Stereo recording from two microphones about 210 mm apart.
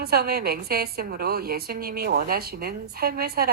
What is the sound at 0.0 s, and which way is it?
A woman's voice, 50° right (ahead or behind).